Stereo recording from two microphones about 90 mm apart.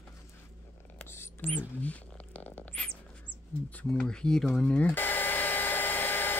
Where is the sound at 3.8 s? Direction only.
10° left (ahead or behind).